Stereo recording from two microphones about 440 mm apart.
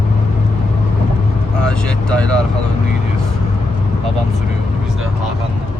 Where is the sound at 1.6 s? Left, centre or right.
Centre.